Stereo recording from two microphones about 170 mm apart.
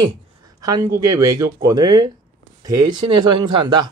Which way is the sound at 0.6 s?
20° right (ahead or behind).